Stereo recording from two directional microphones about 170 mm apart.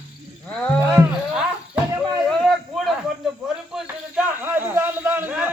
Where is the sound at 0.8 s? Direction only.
10° right (ahead or behind).